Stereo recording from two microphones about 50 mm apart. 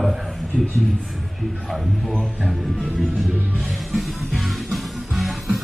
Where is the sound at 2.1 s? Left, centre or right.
Centre.